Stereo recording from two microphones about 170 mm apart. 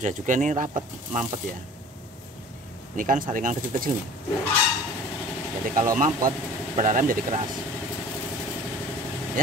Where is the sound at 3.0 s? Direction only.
50° right (ahead or behind).